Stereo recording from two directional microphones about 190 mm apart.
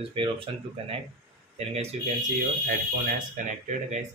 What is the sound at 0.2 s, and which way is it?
Speech, 30° right (ahead or behind).